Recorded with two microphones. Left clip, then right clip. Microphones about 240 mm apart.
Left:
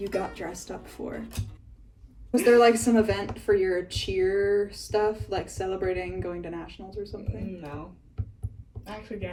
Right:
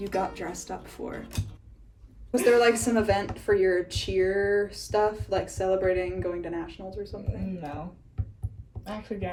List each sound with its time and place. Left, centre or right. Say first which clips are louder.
0.0 s speech: right 1 dB; centre
2.4 s speech: left 2 dB; centre
8.8 s speech: right 3 dB; centre